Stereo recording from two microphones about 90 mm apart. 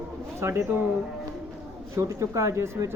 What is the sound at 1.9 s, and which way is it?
Speech, 35° right (ahead or behind).